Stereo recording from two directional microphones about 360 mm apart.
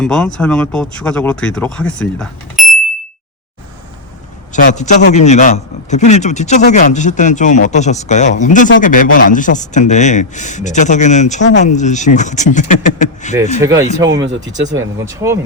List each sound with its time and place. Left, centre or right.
0.0 s speech: centre
4.5 s a man's voice: centre
13.3 s speech: centre